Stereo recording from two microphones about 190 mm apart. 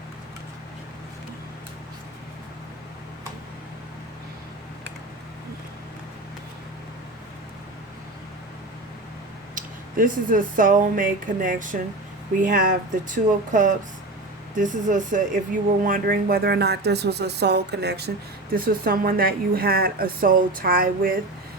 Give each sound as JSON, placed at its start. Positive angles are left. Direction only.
{"t": 10.0, "sound": "a woman's voice", "side_deg": -45}
{"t": 18.5, "sound": "a woman's voice", "side_deg": -50}